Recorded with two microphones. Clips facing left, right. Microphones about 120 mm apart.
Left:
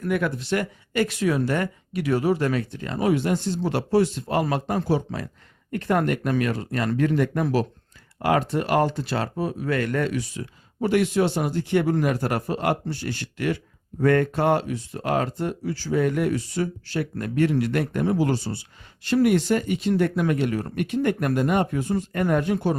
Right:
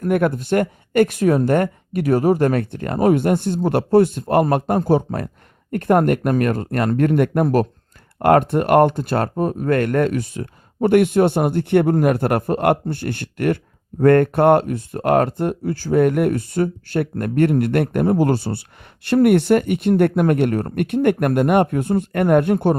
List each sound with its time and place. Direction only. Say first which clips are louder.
0.0 s speech: right 6 dB; 50° right (ahead or behind)